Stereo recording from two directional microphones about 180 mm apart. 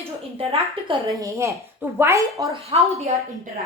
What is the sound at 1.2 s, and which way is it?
A woman's voice, 15° right (ahead or behind).